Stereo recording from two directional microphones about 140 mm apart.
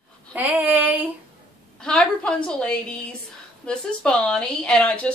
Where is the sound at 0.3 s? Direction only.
10° right (ahead or behind).